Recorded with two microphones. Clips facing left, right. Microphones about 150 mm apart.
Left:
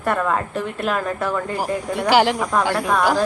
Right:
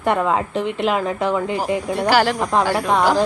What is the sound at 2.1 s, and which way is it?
Speech, 20° left (ahead or behind).